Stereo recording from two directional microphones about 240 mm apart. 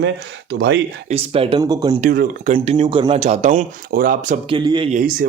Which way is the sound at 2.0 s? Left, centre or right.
Right.